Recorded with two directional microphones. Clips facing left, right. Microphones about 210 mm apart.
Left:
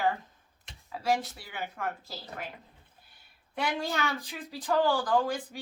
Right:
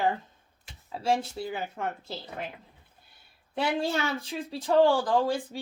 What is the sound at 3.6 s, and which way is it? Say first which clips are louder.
Speech: right 4 dB; 30° right (ahead or behind).